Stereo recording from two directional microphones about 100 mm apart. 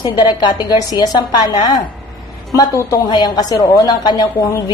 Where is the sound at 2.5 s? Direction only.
35° left (ahead or behind).